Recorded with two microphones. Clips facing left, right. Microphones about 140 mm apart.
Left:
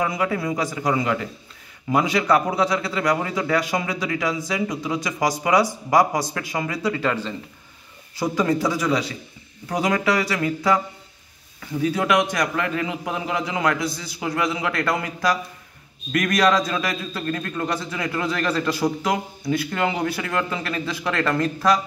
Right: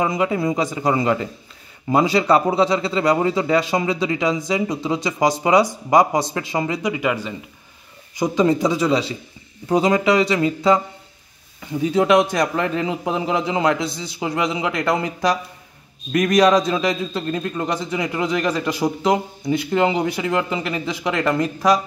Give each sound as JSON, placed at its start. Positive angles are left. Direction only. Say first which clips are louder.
{"t": 0.0, "sound": "a man's voice", "louder": "right 4 dB", "side_deg": -20}